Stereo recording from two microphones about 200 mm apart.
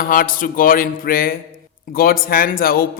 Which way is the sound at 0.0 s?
45° left (ahead or behind).